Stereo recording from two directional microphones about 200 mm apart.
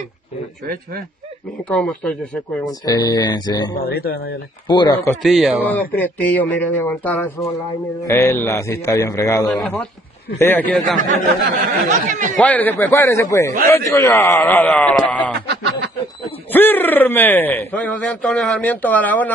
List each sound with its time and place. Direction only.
1.7 s speech: 5° left (ahead or behind)
2.6 s speech: 20° left (ahead or behind)
3.8 s speech: 50° left (ahead or behind)
4.6 s speech: 20° left (ahead or behind)
5.1 s speech: centre (ahead or behind)
5.9 s a man's voice: 10° left (ahead or behind)
9.5 s a man's voice: 5° left (ahead or behind)
11.0 s speech: 40° right (ahead or behind)
12.4 s a man's voice: 10° left (ahead or behind)
15.0 s a sound: 5° left (ahead or behind)
16.5 s speech: 10° left (ahead or behind)